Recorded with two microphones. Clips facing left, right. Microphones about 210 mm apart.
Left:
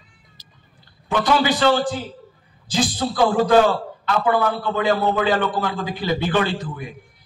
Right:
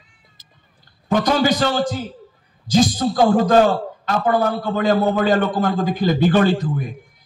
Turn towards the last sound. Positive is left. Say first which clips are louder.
# right 7 dB
turn(degrees=-45)  # may be behind; listen again after turning